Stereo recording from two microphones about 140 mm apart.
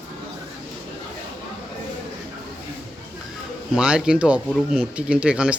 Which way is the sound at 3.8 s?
5° right (ahead or behind).